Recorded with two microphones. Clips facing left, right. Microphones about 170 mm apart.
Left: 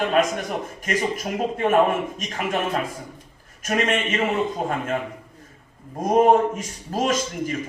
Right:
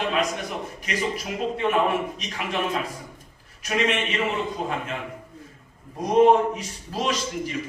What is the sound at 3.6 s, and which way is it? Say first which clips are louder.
Speech: left 2 dB; 45° left (ahead or behind).